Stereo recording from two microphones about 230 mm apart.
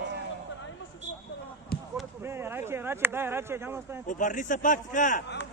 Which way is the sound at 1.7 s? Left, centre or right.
Left.